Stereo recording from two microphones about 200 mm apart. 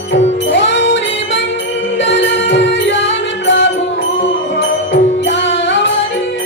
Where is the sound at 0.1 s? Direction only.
65° left (ahead or behind).